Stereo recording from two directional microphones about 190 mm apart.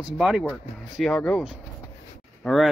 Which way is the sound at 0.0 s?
5° right (ahead or behind).